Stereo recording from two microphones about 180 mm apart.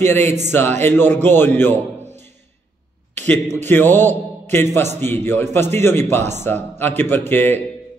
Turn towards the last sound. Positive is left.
turn(degrees=10)  # may be behind; listen again after turning